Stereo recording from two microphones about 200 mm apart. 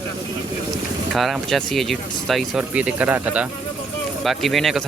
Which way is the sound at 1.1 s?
Centre (ahead or behind).